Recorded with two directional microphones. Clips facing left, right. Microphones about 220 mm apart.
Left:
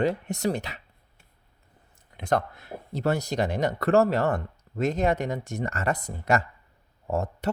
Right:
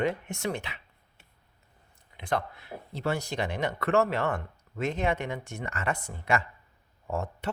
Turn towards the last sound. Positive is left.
turn(degrees=40)  # may be behind; listen again after turning